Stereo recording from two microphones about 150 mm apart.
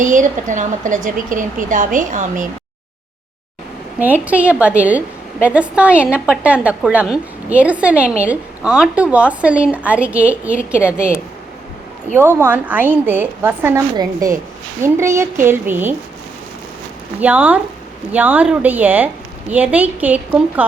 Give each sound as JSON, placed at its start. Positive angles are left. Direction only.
{"t": 0.0, "sound": "a woman's voice", "side_deg": -60}
{"t": 3.9, "sound": "a woman's voice", "side_deg": -10}
{"t": 12.4, "sound": "a woman's voice", "side_deg": -10}
{"t": 13.9, "sound": "a woman's voice", "side_deg": -25}
{"t": 17.2, "sound": "a woman's voice", "side_deg": -10}